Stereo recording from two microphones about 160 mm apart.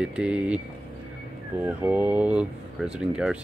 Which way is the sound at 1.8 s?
10° right (ahead or behind).